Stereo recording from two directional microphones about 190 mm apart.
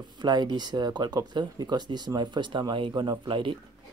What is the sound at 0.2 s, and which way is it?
Speech, 25° right (ahead or behind).